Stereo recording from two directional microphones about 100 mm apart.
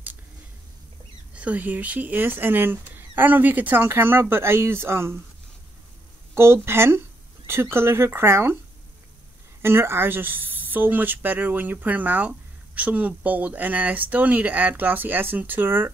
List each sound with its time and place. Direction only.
1.3 s speech: 15° right (ahead or behind)
6.3 s speech: 25° right (ahead or behind)
9.6 s speech: 25° right (ahead or behind)